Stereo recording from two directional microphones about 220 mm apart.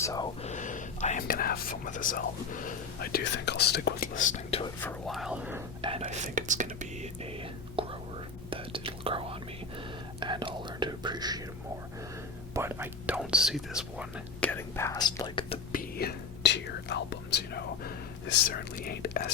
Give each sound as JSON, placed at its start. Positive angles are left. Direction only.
{"t": 0.0, "sound": "speech", "side_deg": 15}
{"t": 0.4, "sound": "speech", "side_deg": 35}
{"t": 4.8, "sound": "speech", "side_deg": 5}
{"t": 5.8, "sound": "speech", "side_deg": -25}
{"t": 7.8, "sound": "whispering", "side_deg": -25}
{"t": 12.5, "sound": "speech", "side_deg": -10}
{"t": 14.5, "sound": "speech", "side_deg": 10}
{"t": 15.7, "sound": "whispering", "side_deg": 40}